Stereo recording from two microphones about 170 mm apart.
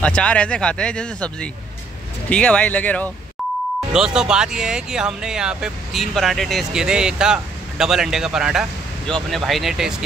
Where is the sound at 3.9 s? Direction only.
5° right (ahead or behind).